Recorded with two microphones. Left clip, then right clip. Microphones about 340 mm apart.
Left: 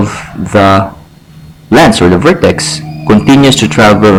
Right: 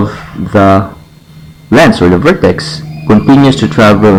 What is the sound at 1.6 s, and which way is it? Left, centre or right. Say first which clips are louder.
A man's voice: left 1 dB; left.